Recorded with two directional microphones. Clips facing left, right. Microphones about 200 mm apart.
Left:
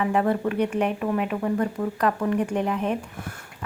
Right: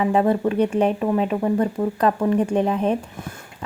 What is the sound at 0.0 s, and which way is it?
Speech, 25° right (ahead or behind).